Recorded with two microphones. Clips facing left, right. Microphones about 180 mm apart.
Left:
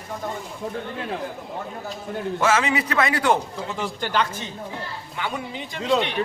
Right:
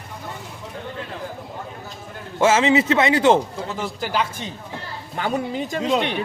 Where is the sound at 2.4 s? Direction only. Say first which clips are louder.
Right 6 dB; 25° right (ahead or behind).